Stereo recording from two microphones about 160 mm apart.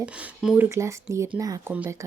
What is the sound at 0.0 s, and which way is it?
Speech, 5° right (ahead or behind).